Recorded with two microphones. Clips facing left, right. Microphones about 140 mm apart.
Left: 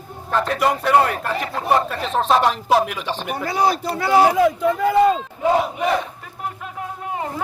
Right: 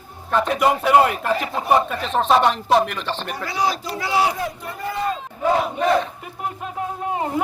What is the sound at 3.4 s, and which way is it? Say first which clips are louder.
Speech: left 4 dB; 50° left (ahead or behind).